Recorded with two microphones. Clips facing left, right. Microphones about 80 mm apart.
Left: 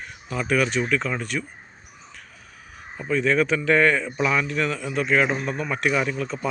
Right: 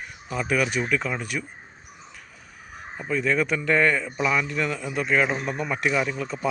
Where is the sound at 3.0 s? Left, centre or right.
Centre.